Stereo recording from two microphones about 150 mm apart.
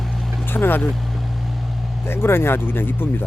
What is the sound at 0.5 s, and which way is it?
Speech, 15° left (ahead or behind).